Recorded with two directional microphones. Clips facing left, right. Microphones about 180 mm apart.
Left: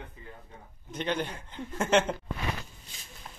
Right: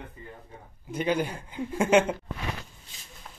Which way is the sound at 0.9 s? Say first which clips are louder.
Right 5 dB; 10° right (ahead or behind).